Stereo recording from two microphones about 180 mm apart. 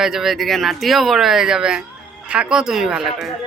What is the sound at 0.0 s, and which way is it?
Speech, centre (ahead or behind).